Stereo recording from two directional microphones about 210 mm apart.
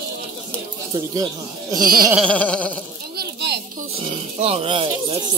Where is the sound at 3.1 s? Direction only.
50° right (ahead or behind).